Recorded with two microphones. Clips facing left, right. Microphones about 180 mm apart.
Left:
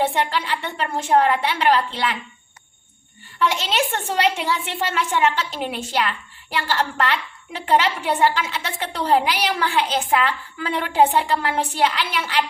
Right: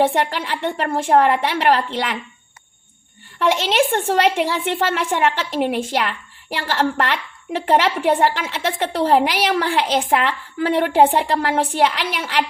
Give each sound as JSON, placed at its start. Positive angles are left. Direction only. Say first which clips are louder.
{"t": 0.0, "sound": "a woman's voice", "louder": "right 3 dB", "side_deg": -55}
{"t": 3.3, "sound": "a woman's voice", "louder": "right 4 dB", "side_deg": -60}